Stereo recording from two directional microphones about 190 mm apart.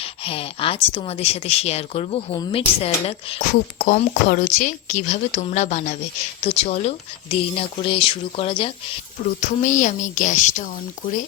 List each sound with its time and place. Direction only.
0.0 s speech: 30° left (ahead or behind)
3.4 s speech: 45° left (ahead or behind); by 9.0 s 30° left (ahead or behind)
9.4 s speech: 40° left (ahead or behind)